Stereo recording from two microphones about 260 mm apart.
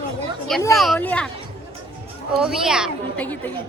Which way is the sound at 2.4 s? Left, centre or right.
Centre.